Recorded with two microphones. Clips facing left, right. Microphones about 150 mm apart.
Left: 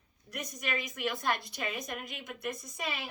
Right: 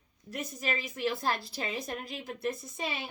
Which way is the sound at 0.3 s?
30° right (ahead or behind).